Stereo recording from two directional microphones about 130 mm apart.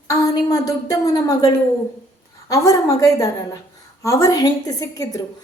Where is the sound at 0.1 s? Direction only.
25° left (ahead or behind).